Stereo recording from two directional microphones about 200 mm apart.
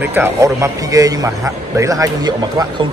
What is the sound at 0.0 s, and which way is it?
A man's voice, 10° right (ahead or behind).